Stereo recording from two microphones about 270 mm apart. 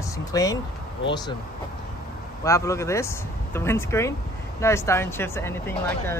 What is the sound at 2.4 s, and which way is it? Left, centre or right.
Speech, centre.